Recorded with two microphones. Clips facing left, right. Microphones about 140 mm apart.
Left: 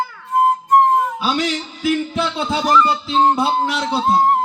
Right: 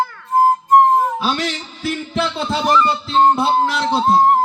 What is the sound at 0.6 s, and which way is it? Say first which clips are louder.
Flute: right 2 dB; 25° right (ahead or behind).